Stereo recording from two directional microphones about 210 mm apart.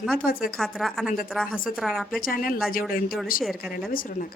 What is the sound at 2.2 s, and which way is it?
Speech, 45° left (ahead or behind).